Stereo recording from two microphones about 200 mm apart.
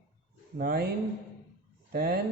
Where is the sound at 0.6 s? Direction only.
50° right (ahead or behind).